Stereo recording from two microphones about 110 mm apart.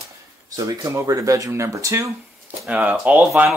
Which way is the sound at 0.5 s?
30° right (ahead or behind).